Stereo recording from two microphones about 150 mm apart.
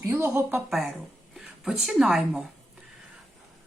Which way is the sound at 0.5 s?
Centre (ahead or behind).